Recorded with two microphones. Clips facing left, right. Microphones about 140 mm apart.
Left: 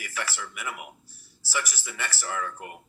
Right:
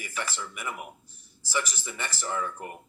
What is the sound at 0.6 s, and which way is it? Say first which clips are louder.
Speech: right 1 dB; 5° left (ahead or behind).